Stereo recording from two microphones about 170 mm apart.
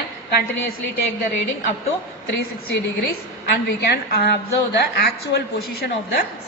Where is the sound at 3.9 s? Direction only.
75° left (ahead or behind).